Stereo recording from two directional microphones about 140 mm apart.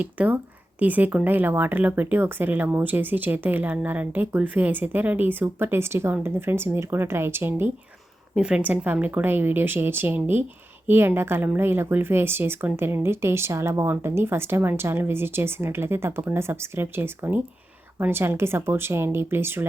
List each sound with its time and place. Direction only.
0.0 s speech: 10° right (ahead or behind)